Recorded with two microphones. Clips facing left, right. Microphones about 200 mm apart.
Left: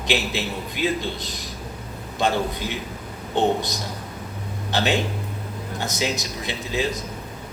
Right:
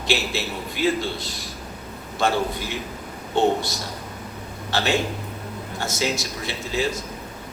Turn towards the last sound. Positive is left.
turn(degrees=20)  # may be behind; listen again after turning